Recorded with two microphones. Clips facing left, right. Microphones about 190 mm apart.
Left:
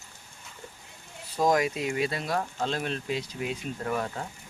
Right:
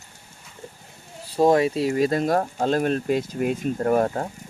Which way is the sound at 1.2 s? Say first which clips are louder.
Right 7 dB; 30° right (ahead or behind).